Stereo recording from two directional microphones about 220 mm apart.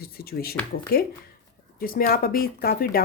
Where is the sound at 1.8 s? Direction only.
40° left (ahead or behind).